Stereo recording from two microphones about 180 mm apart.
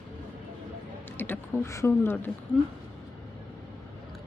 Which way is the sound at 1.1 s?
10° left (ahead or behind).